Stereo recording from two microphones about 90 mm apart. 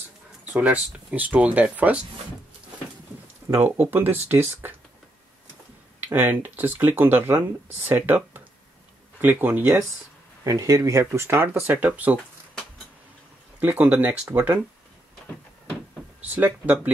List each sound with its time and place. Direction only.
0.5 s speech: 15° right (ahead or behind)
3.6 s speech: 20° right (ahead or behind)
6.0 s speech: 25° right (ahead or behind)
10.4 s speech: 40° right (ahead or behind); by 12.2 s 20° right (ahead or behind)
13.6 s speech: 20° right (ahead or behind)
16.3 s speech: 20° right (ahead or behind)